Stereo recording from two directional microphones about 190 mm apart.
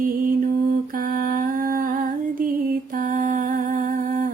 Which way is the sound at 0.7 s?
50° right (ahead or behind).